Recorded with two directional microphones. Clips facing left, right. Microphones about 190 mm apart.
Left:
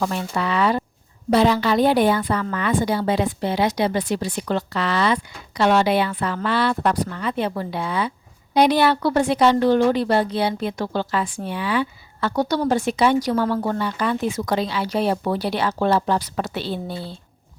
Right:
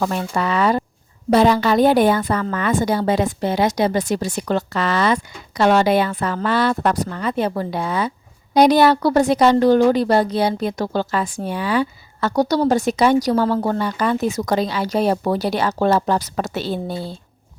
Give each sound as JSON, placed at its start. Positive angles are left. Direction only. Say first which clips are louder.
{"t": 0.0, "sound": "a woman's voice", "louder": "right 3 dB", "side_deg": -45}